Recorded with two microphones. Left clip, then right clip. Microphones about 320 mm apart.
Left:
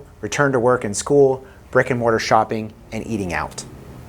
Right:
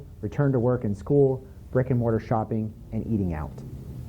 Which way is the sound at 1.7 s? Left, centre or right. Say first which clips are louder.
Left 9 dB; centre.